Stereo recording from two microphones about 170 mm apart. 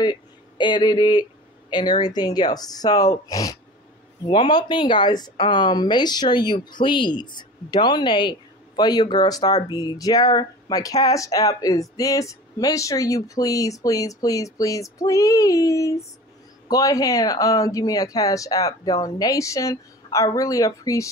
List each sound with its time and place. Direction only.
0.0 s speech: 25° left (ahead or behind)